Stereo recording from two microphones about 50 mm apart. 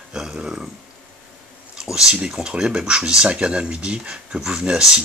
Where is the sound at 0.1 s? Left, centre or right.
Centre.